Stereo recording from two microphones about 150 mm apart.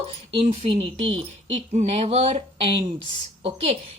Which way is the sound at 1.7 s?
50° right (ahead or behind).